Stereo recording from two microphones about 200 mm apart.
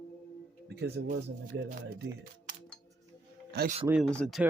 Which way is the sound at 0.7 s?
55° right (ahead or behind).